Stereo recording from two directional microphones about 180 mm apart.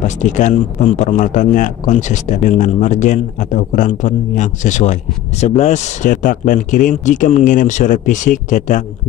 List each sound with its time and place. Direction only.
0.0 s speech: 45° left (ahead or behind)